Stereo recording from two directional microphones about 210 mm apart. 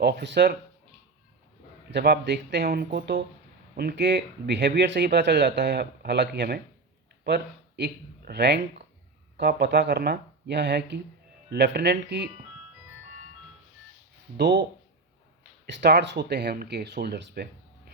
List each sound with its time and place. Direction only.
0.0 s speech: 55° right (ahead or behind)
1.9 s speech: 55° right (ahead or behind)
14.3 s speech: 55° right (ahead or behind)
15.6 s speech: 55° right (ahead or behind)